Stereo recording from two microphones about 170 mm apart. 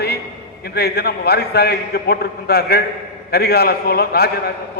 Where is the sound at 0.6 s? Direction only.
70° left (ahead or behind).